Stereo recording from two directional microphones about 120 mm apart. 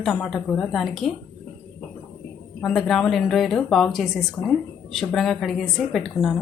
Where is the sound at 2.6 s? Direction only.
Centre (ahead or behind).